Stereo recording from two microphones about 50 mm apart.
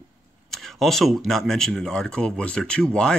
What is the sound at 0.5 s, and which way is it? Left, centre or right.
Speech, centre.